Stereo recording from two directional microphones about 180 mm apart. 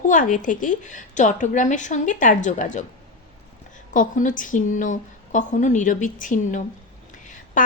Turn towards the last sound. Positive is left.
turn(degrees=45)  # may be behind; listen again after turning